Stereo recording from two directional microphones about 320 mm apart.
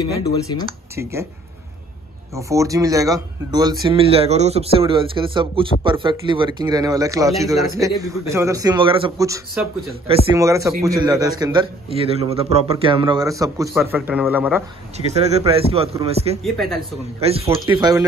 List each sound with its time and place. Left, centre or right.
2.3 s speech: centre
15.1 s speech: centre
16.5 s a man's voice: centre
17.2 s speech: centre